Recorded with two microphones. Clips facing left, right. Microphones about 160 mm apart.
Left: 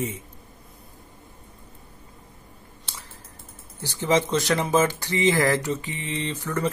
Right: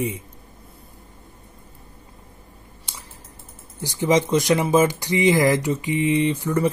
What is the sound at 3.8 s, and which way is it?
Speech, 15° right (ahead or behind).